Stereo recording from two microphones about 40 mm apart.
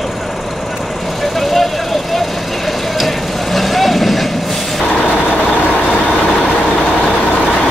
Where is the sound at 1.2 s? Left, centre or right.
Centre.